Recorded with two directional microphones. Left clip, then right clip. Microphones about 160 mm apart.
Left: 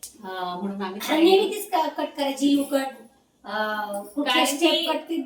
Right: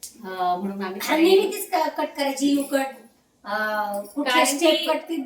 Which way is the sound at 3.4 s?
10° right (ahead or behind).